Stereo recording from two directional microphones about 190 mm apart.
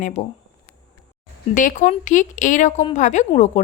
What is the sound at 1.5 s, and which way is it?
A woman's voice, 40° left (ahead or behind).